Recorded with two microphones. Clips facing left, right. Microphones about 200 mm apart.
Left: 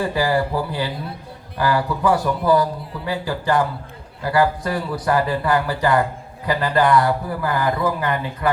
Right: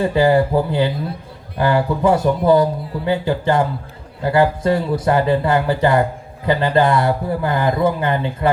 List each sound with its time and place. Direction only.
0.0 s speech: 25° right (ahead or behind)